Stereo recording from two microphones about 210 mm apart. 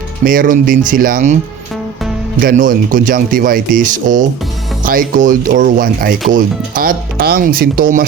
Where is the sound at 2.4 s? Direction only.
40° right (ahead or behind).